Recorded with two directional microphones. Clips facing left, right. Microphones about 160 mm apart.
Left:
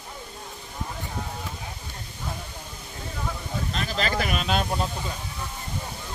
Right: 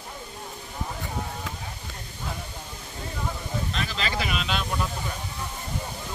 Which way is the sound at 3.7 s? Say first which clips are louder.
Left 5 dB; 45° left (ahead or behind).